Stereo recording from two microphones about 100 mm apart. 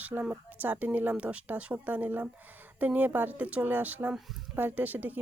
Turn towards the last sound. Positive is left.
turn(degrees=-15)  # may be behind; listen again after turning